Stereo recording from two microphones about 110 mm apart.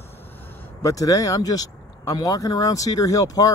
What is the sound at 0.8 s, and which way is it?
Speech, 30° left (ahead or behind).